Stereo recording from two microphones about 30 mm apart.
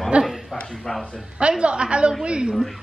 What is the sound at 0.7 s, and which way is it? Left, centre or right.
Speech, centre.